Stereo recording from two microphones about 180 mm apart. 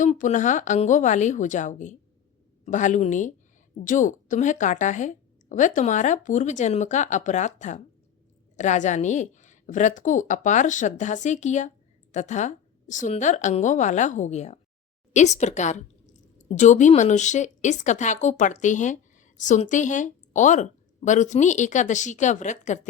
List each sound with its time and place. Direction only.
0.0 s a woman's voice: 40° left (ahead or behind)